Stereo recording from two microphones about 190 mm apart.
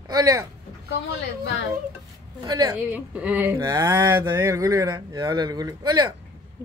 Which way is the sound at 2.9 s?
5° right (ahead or behind).